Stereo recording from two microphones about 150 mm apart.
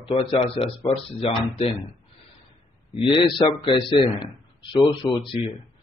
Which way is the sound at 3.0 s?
35° left (ahead or behind).